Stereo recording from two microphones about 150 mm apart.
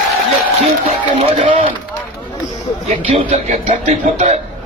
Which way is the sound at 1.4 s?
40° right (ahead or behind).